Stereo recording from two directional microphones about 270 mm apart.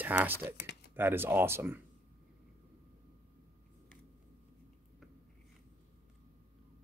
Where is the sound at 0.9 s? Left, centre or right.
Centre.